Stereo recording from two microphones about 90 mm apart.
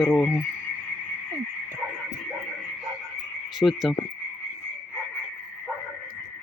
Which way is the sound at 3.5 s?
Centre (ahead or behind).